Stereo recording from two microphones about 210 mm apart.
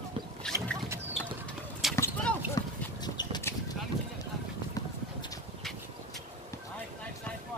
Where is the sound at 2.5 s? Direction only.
15° left (ahead or behind).